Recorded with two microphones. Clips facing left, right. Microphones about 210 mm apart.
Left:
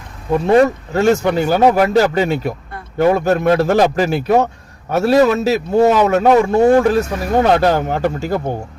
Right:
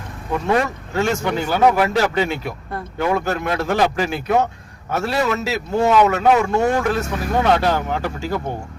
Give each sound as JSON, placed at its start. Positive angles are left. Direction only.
{"t": 0.4, "sound": "a man's voice", "side_deg": 35}